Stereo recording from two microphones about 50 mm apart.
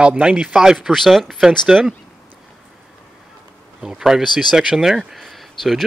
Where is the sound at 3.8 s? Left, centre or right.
Centre.